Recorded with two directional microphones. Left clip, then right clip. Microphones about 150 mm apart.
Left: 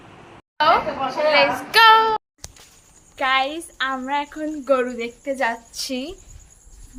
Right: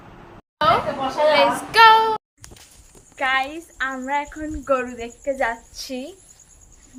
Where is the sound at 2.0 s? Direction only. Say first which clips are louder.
Left 1 dB; 20° right (ahead or behind).